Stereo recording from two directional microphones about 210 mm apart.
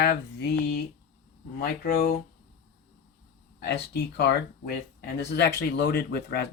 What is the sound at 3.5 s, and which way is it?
Speech, 50° left (ahead or behind).